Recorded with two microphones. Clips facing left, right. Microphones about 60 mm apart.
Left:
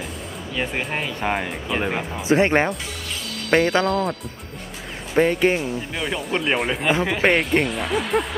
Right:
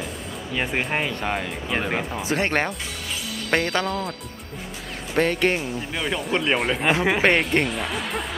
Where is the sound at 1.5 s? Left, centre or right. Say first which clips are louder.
Left 1 dB; centre.